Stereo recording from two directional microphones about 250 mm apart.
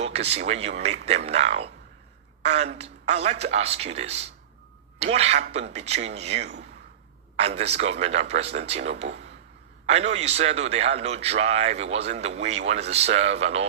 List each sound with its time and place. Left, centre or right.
0.0 s a man's voice: right